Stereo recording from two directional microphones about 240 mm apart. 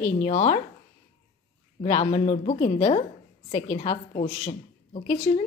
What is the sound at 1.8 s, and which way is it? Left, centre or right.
A woman's voice, left.